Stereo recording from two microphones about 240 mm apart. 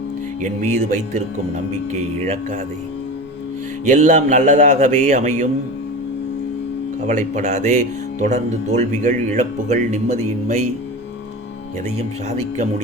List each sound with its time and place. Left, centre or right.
0.4 s speech: right
3.8 s a man's voice: right
7.1 s speech: right